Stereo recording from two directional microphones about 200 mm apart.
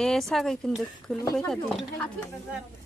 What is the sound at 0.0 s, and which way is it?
Speech, centre (ahead or behind).